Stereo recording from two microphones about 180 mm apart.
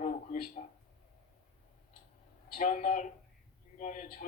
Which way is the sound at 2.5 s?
45° left (ahead or behind).